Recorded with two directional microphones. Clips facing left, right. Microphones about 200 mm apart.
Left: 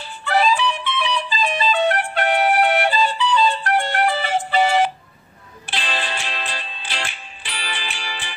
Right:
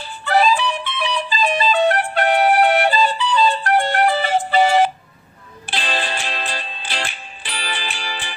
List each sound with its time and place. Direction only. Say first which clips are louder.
0.2 s music: right 2 dB; 40° right (ahead or behind)